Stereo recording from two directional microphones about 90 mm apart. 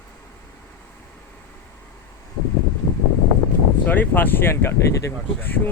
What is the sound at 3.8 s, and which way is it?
Speech, 20° left (ahead or behind).